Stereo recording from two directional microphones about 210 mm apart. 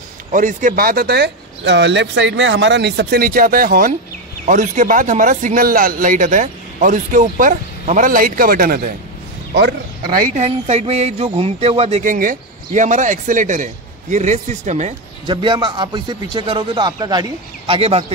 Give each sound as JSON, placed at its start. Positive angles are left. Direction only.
{"t": 0.3, "sound": "speech", "side_deg": -40}
{"t": 10.4, "sound": "speech", "side_deg": -30}
{"t": 15.2, "sound": "a man's voice", "side_deg": -20}